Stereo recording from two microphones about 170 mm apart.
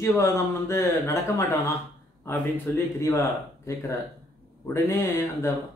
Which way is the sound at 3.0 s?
15° left (ahead or behind).